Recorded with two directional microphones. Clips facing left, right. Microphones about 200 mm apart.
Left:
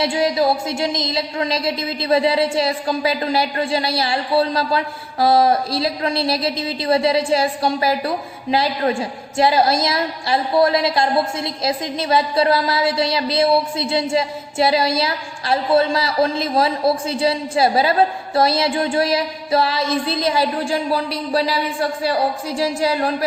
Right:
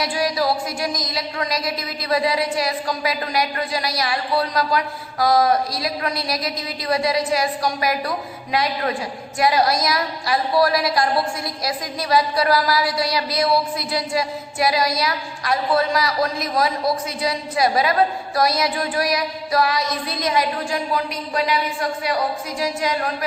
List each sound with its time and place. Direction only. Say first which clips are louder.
0.0 s a woman's voice: left 4 dB; 25° left (ahead or behind)